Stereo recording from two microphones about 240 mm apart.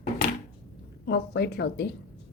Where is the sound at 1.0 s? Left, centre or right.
Left.